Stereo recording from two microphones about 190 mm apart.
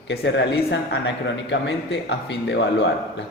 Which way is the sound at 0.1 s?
60° left (ahead or behind).